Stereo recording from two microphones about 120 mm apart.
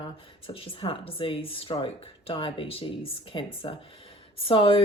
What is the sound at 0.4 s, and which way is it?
Speech, 50° left (ahead or behind).